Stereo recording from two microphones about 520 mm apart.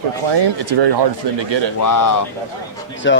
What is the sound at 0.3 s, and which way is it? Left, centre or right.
Speech, right.